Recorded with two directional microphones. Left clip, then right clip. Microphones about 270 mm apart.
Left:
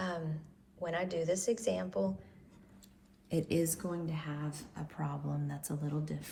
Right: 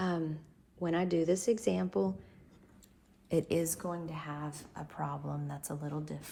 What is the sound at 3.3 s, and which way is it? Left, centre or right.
A woman's voice, right.